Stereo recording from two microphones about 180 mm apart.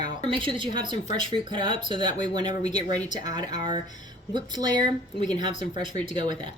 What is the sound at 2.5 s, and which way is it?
Speech, 40° left (ahead or behind).